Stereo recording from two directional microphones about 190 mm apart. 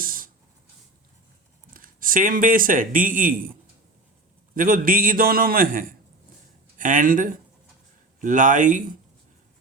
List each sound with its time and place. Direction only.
0.0 s a sound: 50° right (ahead or behind)
1.7 s speech: 45° right (ahead or behind)
4.5 s a man's voice: 45° right (ahead or behind)